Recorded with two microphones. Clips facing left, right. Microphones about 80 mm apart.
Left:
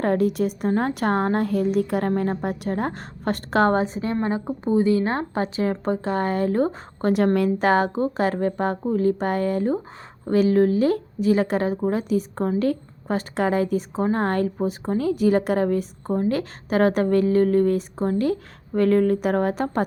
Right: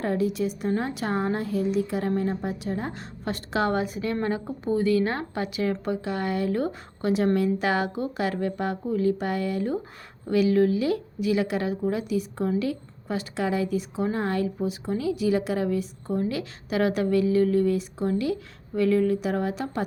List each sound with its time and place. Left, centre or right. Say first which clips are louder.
0.0 s speech: left 4 dB; left